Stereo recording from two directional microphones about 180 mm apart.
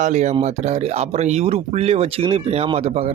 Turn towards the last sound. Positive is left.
turn(degrees=-35)  # may be behind; listen again after turning